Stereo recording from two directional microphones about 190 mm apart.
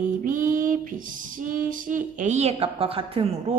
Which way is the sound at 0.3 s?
45° right (ahead or behind).